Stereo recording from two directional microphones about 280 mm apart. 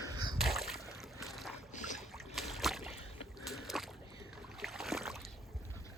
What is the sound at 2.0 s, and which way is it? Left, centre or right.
Boat, centre.